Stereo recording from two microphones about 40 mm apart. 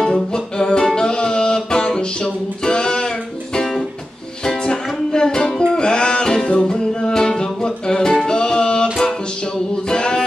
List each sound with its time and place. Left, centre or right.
0.3 s music: left
4.5 s music: centre
9.8 s a sound: centre